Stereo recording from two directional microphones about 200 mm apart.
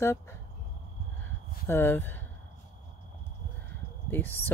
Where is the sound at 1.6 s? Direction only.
10° left (ahead or behind).